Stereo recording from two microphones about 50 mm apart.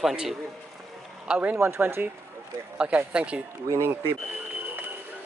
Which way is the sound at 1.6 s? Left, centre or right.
Right.